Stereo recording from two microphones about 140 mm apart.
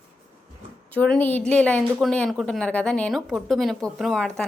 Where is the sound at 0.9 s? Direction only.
10° left (ahead or behind).